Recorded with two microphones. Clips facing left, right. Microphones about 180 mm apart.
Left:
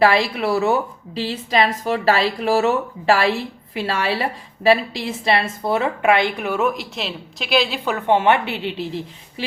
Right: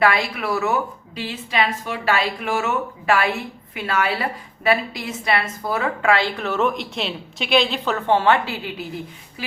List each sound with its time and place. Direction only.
0.0 s a woman's voice: 25° left (ahead or behind)